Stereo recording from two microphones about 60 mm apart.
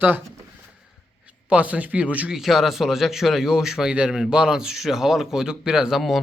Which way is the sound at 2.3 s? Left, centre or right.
Centre.